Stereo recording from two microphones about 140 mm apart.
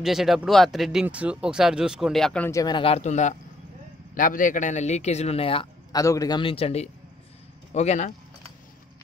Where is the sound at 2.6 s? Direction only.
35° left (ahead or behind); by 3.3 s 60° left (ahead or behind).